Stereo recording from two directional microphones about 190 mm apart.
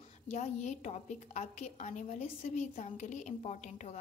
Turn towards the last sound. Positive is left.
turn(degrees=35)  # may be behind; listen again after turning